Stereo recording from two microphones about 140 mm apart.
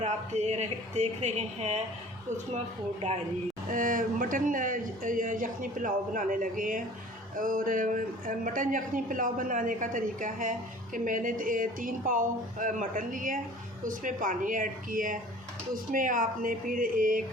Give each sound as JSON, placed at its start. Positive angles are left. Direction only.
{"t": 0.0, "sound": "speech", "side_deg": -55}
{"t": 3.7, "sound": "a man's voice", "side_deg": -75}